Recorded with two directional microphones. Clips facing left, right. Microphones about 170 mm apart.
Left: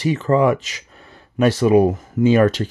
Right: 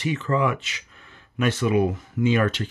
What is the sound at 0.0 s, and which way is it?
Speech, 35° left (ahead or behind).